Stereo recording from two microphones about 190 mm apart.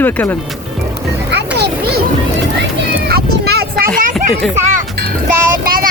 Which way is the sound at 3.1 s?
55° right (ahead or behind).